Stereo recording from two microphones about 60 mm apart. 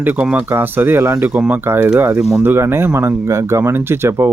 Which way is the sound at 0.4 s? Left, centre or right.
Right.